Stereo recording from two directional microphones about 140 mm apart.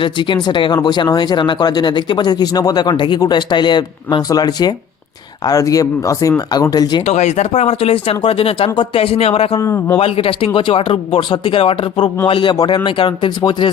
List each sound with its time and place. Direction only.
0.0 s speech: 35° left (ahead or behind)
7.0 s speech: 55° left (ahead or behind)
9.6 s speech: 20° left (ahead or behind)
10.0 s speech: 40° left (ahead or behind)